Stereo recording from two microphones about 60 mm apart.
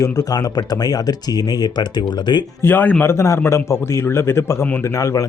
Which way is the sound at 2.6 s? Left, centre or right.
Left.